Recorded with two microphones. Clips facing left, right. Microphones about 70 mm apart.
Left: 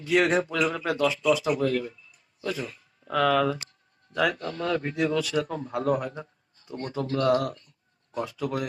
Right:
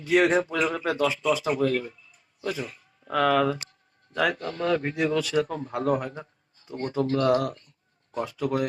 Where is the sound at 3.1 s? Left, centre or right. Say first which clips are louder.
Right 1 dB; right.